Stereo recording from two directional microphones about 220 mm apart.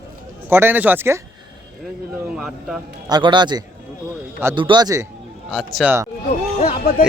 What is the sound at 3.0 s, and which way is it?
Speech, 20° right (ahead or behind).